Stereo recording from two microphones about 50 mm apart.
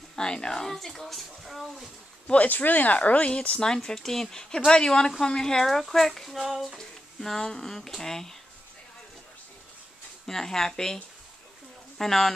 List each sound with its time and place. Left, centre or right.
0.1 s speech: centre
2.2 s speech: left; by 8.4 s centre
10.2 s speech: centre
12.0 s speech: centre